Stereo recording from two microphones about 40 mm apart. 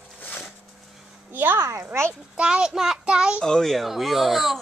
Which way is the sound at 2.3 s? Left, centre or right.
Right.